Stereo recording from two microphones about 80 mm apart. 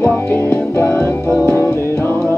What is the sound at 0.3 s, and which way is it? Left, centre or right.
Music, left.